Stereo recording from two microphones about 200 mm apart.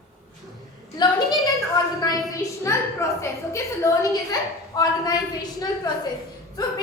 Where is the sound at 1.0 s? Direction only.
20° left (ahead or behind).